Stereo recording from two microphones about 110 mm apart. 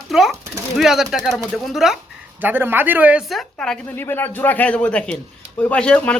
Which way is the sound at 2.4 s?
20° right (ahead or behind).